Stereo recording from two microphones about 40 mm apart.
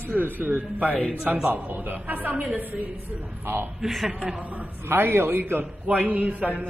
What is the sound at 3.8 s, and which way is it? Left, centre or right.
Speech, centre.